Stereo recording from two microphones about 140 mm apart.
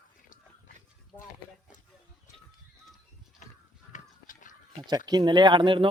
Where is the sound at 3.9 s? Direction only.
65° left (ahead or behind).